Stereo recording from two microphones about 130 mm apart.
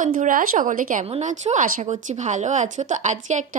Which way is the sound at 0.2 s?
90° right.